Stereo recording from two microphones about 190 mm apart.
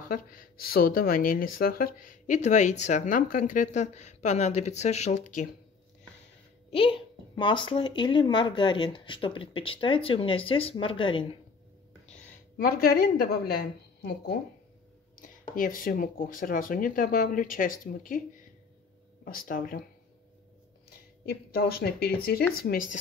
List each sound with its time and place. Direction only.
0.1 s speech: 50° left (ahead or behind)
6.7 s a child's voice: 30° left (ahead or behind)
12.5 s speech: 50° left (ahead or behind)
15.1 s speech: 45° left (ahead or behind)
19.2 s speech: 45° left (ahead or behind)
21.3 s speech: 55° left (ahead or behind)